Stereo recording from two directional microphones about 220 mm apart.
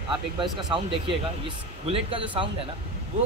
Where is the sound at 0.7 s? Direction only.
20° right (ahead or behind).